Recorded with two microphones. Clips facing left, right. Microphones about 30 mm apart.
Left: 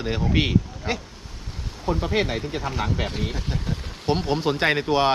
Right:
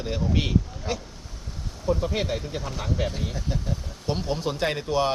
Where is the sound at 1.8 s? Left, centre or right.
Left.